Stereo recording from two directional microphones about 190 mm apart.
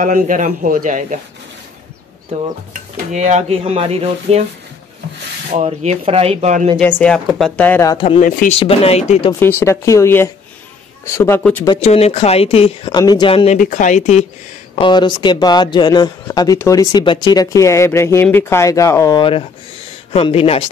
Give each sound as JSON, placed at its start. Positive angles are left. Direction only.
{"t": 0.0, "sound": "a man's voice", "side_deg": -45}
{"t": 3.1, "sound": "speech", "side_deg": -40}
{"t": 5.5, "sound": "speech", "side_deg": -35}
{"t": 6.8, "sound": "a woman's voice", "side_deg": 10}
{"t": 8.2, "sound": "speech", "side_deg": 45}
{"t": 8.5, "sound": "speech", "side_deg": 30}
{"t": 9.4, "sound": "a woman's voice", "side_deg": 10}
{"t": 11.8, "sound": "speech", "side_deg": 35}
{"t": 13.6, "sound": "speech", "side_deg": 40}
{"t": 14.8, "sound": "a man's voice", "side_deg": 25}